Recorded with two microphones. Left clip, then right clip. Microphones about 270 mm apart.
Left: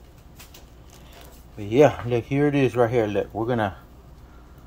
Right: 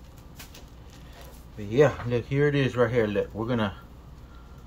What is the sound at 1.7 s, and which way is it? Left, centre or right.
Speech, left.